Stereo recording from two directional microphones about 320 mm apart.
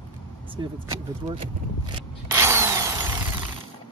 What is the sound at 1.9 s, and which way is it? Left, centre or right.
Drill, centre.